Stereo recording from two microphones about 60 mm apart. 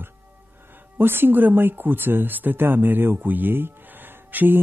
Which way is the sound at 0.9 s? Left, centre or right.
Right.